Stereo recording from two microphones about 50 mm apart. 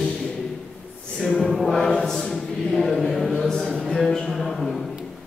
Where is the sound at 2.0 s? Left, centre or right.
Centre.